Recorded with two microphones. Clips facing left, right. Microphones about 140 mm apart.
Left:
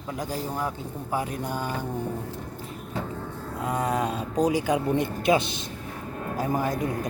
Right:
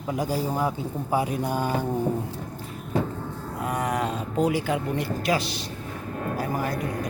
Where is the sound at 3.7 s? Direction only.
25° left (ahead or behind).